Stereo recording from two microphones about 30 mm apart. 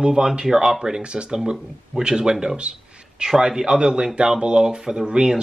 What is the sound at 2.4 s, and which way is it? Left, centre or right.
Speech, right.